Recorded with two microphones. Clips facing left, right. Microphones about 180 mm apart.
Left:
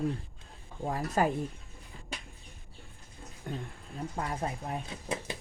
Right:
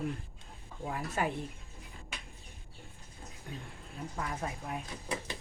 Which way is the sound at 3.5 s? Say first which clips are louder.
Left 7 dB; 55° left (ahead or behind).